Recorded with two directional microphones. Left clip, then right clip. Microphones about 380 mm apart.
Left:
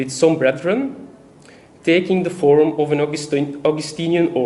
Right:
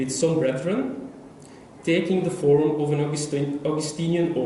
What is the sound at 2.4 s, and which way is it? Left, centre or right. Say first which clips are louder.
Speech: left 5 dB; centre.